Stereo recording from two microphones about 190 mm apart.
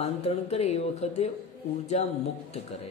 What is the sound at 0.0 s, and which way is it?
Speech, 35° left (ahead or behind).